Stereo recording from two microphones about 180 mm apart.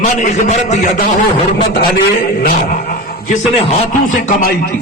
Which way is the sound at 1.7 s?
65° left (ahead or behind).